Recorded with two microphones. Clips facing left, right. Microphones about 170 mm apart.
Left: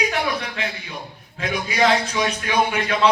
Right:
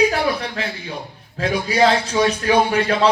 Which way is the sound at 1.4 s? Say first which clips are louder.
Right 4 dB; 35° right (ahead or behind).